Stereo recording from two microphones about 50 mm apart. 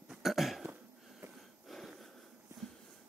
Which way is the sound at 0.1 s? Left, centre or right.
Centre.